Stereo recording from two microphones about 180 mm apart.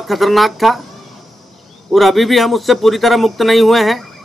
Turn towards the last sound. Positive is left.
turn(degrees=0)  # may be behind; listen again after turning